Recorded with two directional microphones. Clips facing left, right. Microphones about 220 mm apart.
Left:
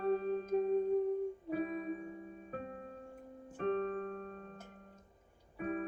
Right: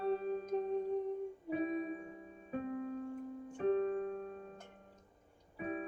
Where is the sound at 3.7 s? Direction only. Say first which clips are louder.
Right 3 dB; 10° right (ahead or behind).